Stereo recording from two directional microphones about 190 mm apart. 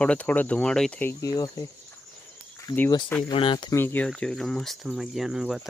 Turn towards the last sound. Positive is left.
turn(degrees=-5)  # may be behind; listen again after turning